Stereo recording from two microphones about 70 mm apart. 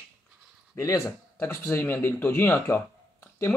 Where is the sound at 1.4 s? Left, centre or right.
Left.